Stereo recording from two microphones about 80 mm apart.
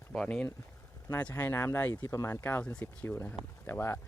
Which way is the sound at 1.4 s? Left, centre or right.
Left.